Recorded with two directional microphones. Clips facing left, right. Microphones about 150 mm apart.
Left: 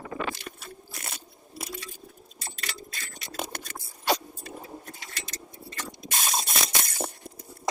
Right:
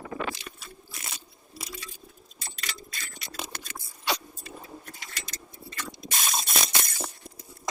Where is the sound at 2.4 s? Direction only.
40° left (ahead or behind).